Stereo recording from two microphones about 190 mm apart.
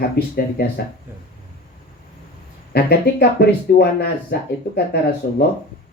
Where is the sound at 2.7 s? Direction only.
55° left (ahead or behind).